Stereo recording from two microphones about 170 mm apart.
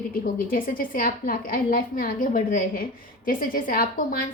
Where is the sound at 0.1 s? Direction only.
55° left (ahead or behind).